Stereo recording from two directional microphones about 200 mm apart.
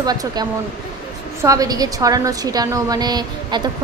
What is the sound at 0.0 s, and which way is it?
A woman's voice, 20° right (ahead or behind).